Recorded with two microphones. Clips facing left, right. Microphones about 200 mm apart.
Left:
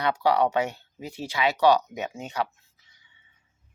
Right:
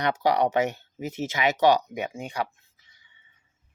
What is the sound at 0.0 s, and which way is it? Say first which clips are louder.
Speech: even; 20° right (ahead or behind).